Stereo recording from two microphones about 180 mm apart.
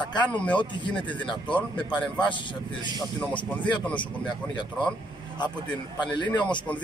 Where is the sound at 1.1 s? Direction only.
25° left (ahead or behind).